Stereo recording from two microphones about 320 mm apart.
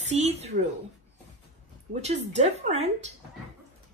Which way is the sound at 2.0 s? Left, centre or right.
Right.